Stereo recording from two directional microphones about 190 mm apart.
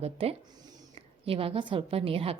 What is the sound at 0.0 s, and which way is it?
Speech, 30° right (ahead or behind).